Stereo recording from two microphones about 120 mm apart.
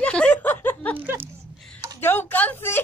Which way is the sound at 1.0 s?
15° right (ahead or behind).